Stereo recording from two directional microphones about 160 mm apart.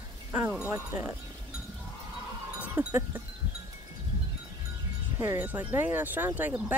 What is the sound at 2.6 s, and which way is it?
Goat, 15° right (ahead or behind).